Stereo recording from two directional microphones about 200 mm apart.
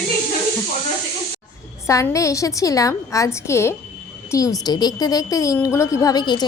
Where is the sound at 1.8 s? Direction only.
15° left (ahead or behind).